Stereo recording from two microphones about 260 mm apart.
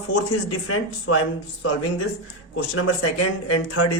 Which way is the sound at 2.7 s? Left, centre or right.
Left.